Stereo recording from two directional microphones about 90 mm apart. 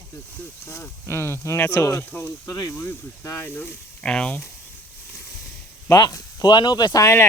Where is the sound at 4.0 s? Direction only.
10° left (ahead or behind).